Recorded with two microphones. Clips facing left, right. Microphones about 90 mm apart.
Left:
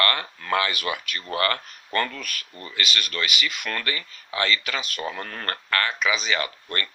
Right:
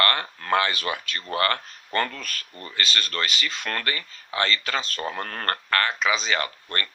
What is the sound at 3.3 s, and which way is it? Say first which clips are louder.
Speech: left 1 dB; 10° left (ahead or behind).